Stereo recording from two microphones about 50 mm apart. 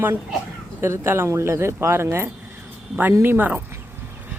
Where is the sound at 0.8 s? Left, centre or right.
Right.